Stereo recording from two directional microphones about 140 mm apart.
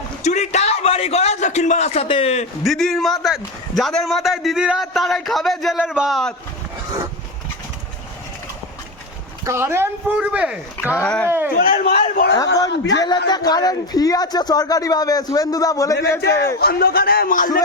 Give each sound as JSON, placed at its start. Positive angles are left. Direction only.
{"t": 0.2, "sound": "a man's voice", "side_deg": 55}
{"t": 2.6, "sound": "a man's voice", "side_deg": 0}
{"t": 9.4, "sound": "speech", "side_deg": -20}
{"t": 10.9, "sound": "speech", "side_deg": 10}
{"t": 11.3, "sound": "speech", "side_deg": -15}
{"t": 11.6, "sound": "a man's voice", "side_deg": 90}
{"t": 12.4, "sound": "a man's voice", "side_deg": 25}
{"t": 16.6, "sound": "a man's voice", "side_deg": 90}